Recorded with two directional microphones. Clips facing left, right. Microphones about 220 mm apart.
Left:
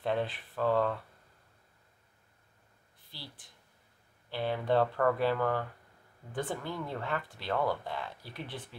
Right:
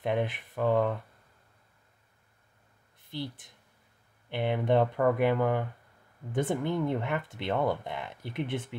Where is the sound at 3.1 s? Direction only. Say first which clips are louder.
Right 13 dB; 20° right (ahead or behind).